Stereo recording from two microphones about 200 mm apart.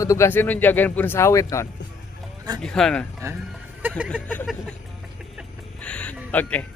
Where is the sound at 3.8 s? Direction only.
10° right (ahead or behind).